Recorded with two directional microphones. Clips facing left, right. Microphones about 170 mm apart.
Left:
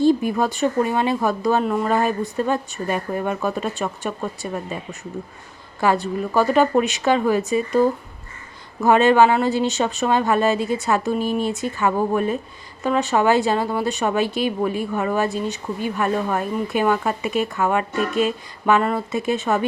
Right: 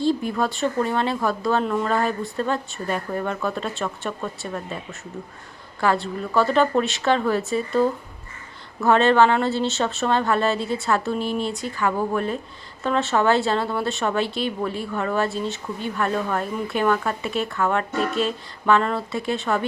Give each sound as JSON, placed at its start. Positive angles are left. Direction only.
{"t": 0.0, "sound": "speech", "side_deg": 15}